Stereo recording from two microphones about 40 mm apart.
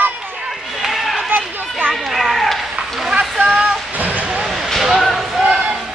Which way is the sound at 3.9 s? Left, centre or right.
Right.